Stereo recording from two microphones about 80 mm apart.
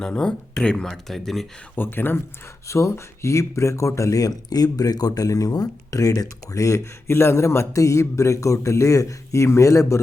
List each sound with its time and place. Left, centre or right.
0.0 s speech: centre
1.7 s speech: left
2.6 s speech: left